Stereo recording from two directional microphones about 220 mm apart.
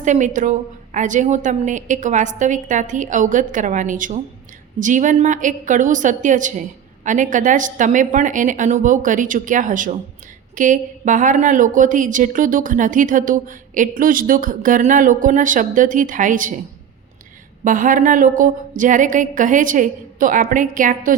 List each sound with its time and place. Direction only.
0.0 s a woman's voice: 35° right (ahead or behind)
17.6 s a woman's voice: 35° right (ahead or behind)